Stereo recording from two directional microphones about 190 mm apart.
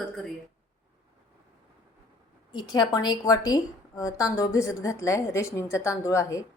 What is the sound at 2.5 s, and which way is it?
A woman's voice, 20° left (ahead or behind).